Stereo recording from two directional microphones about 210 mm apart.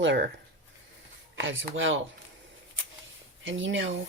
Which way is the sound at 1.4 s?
65° right (ahead or behind).